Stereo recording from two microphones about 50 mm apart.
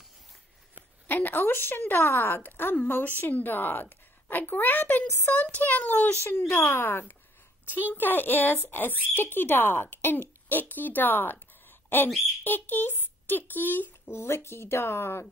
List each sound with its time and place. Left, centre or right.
1.0 s a woman's voice: left
6.1 s a woman's voice: left
14.0 s speech: left